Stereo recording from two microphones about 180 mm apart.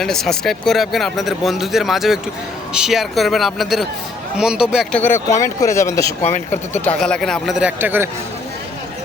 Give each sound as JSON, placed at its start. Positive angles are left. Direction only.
{"t": 0.0, "sound": "speech", "side_deg": 5}
{"t": 4.9, "sound": "speech", "side_deg": 10}
{"t": 6.8, "sound": "speech", "side_deg": 5}